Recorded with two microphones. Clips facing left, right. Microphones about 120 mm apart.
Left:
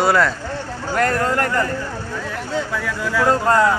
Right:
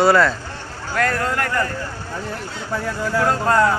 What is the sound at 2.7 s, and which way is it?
Speech, 40° right (ahead or behind).